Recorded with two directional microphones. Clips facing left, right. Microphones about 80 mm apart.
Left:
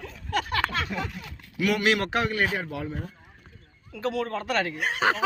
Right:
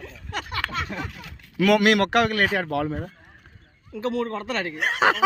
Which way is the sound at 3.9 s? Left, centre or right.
Right.